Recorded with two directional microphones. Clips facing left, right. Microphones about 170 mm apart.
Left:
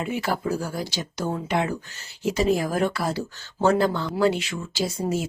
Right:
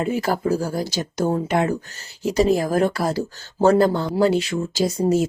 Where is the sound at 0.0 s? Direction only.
40° right (ahead or behind).